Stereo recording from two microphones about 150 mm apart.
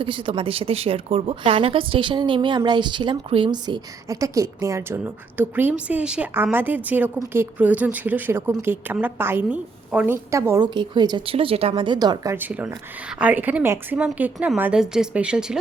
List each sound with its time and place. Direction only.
0.0 s a woman's voice: 35° right (ahead or behind); by 10.2 s 10° right (ahead or behind)
10.3 s a woman's voice: 20° right (ahead or behind); by 11.7 s 40° right (ahead or behind)
11.7 s speech: 30° right (ahead or behind)
12.4 s speech: 10° right (ahead or behind)